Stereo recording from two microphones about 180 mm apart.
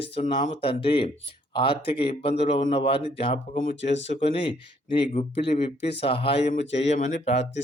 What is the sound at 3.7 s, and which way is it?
Speech, 85° left.